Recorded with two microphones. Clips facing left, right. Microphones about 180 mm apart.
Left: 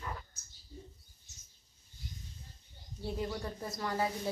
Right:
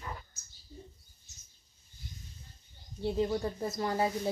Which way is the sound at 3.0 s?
25° right (ahead or behind).